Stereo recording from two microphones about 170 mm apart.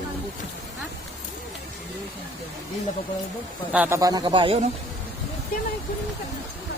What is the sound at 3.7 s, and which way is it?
Speech, 15° right (ahead or behind).